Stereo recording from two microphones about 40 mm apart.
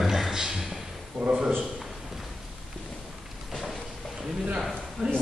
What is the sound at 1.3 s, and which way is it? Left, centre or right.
Speech, centre.